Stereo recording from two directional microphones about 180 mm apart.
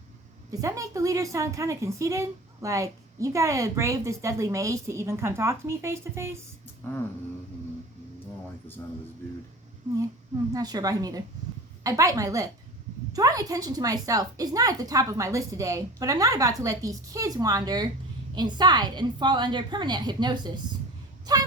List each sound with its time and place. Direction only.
0.5 s a woman's voice: 20° right (ahead or behind)
6.8 s a sound: 10° left (ahead or behind)
10.5 s a woman's voice: 20° right (ahead or behind)